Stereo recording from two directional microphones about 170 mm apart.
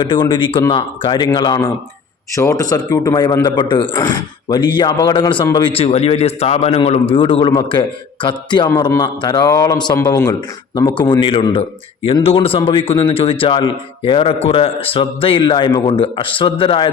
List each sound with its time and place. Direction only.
0.0 s a man's voice: 30° left (ahead or behind)